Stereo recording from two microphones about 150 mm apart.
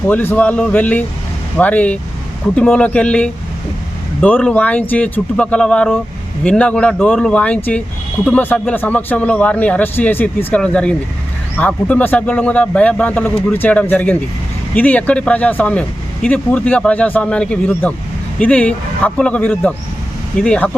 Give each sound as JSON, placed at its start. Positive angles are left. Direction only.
{"t": 0.1, "sound": "speech", "side_deg": 10}